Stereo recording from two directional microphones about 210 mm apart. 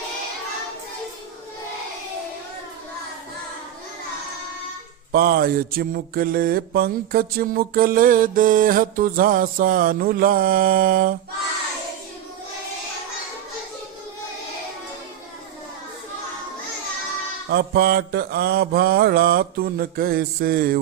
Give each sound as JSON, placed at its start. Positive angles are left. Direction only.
{"t": 5.1, "sound": "mantra", "side_deg": -45}
{"t": 17.5, "sound": "mantra", "side_deg": -50}